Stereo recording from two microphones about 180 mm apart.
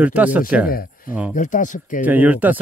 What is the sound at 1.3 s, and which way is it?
Speech, 45° left (ahead or behind).